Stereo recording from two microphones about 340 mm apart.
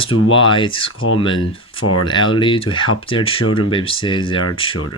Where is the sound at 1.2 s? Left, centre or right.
Centre.